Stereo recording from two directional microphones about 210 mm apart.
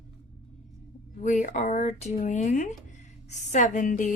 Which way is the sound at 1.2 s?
35° left (ahead or behind).